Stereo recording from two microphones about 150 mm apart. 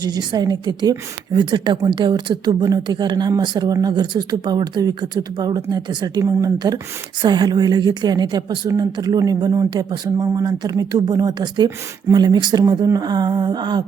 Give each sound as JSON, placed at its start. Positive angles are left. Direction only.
{"t": 0.0, "sound": "a woman's voice", "side_deg": -30}